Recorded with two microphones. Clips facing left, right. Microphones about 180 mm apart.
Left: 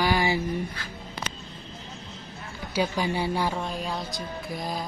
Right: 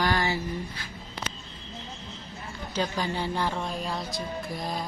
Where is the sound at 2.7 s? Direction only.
10° left (ahead or behind).